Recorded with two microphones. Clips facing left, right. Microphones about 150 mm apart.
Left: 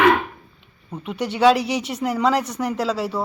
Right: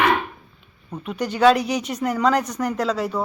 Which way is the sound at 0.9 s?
15° left (ahead or behind).